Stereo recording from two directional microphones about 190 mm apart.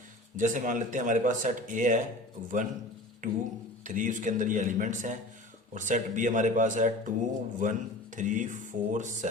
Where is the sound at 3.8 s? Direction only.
45° right (ahead or behind).